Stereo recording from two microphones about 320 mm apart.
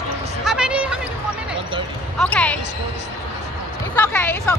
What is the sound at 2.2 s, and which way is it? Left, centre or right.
Speech, centre.